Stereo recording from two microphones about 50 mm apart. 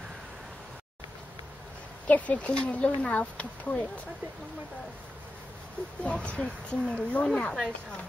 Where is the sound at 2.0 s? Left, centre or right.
Left.